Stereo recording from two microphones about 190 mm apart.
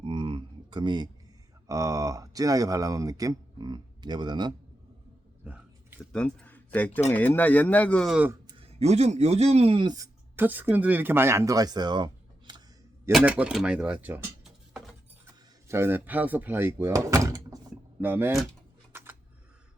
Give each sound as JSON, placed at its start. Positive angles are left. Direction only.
{"t": 0.0, "sound": "a sound", "side_deg": -25}
{"t": 1.6, "sound": "speech", "side_deg": -20}
{"t": 6.1, "sound": "speech", "side_deg": 5}
{"t": 8.3, "sound": "speech", "side_deg": -25}
{"t": 13.1, "sound": "speech", "side_deg": -5}
{"t": 15.7, "sound": "speech", "side_deg": -10}
{"t": 18.9, "sound": "a sound", "side_deg": -10}